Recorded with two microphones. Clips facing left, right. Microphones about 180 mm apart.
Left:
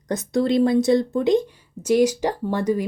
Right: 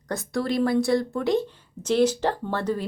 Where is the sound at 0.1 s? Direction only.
20° left (ahead or behind).